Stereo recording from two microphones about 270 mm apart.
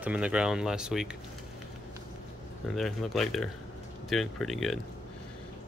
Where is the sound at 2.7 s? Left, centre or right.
Centre.